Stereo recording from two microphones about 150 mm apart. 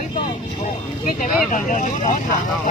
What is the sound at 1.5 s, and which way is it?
Speech, 60° left (ahead or behind).